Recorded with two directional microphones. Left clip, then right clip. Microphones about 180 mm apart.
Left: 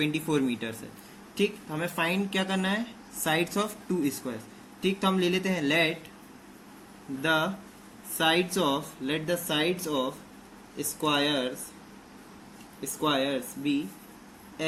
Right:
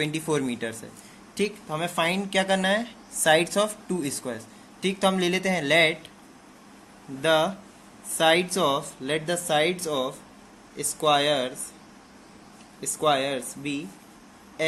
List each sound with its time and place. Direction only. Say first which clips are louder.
0.0 s speech: right 1 dB; 50° right (ahead or behind)
7.2 s speech: right 5 dB; 55° right (ahead or behind)
12.8 s speech: right 4 dB; 55° right (ahead or behind)